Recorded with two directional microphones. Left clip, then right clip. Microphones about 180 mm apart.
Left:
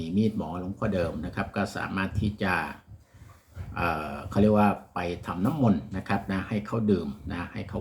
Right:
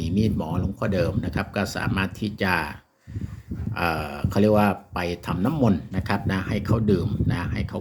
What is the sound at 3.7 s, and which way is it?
Speech, 50° right (ahead or behind).